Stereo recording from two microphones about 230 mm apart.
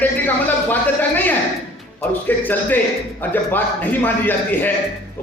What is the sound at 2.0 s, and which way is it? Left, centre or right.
A man's voice, centre.